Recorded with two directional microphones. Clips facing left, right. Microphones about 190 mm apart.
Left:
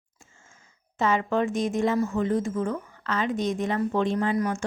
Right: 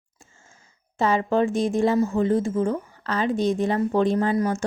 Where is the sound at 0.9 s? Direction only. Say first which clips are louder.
Right 3 dB; 35° right (ahead or behind).